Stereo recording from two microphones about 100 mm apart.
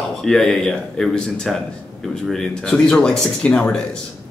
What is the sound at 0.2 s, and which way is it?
Speech, 5° left (ahead or behind).